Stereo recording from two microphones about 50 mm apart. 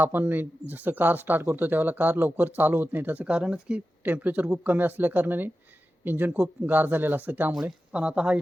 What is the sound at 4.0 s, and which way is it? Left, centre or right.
Speech, right.